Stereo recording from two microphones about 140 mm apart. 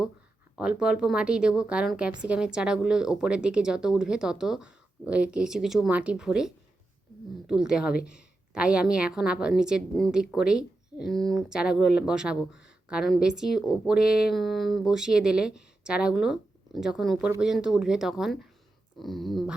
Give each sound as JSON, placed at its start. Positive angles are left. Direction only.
{"t": 0.5, "sound": "a woman's voice", "side_deg": -5}